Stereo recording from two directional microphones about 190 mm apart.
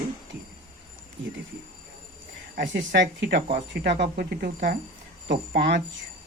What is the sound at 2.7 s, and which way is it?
Speech, 70° right (ahead or behind).